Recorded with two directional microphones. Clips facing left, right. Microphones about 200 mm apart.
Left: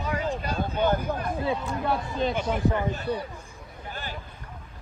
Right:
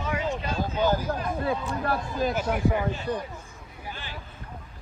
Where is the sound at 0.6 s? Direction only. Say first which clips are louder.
Even; 5° right (ahead or behind).